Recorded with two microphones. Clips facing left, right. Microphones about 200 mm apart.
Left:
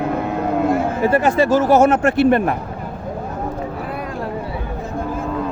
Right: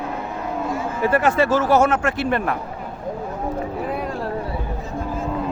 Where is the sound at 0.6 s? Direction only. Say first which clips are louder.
Left 8 dB; 60° left (ahead or behind).